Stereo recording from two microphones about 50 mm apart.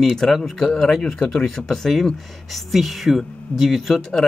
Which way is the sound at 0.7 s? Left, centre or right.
Centre.